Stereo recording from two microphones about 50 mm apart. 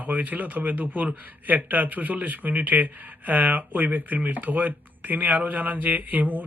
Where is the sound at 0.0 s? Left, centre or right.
Right.